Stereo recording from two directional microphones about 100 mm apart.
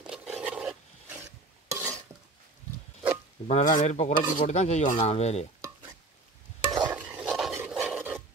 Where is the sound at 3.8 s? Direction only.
90° left.